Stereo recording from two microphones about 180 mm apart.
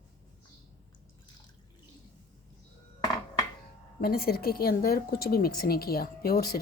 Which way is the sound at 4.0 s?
60° left (ahead or behind).